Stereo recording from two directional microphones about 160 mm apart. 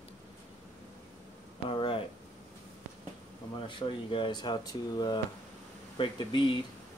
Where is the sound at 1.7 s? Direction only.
35° left (ahead or behind).